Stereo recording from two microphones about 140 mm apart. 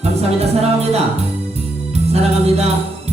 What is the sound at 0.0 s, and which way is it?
Music, 50° right (ahead or behind).